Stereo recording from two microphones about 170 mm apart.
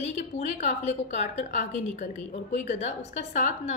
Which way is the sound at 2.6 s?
40° left (ahead or behind).